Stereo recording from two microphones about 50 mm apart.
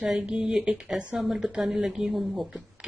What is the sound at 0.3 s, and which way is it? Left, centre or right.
Speech, right.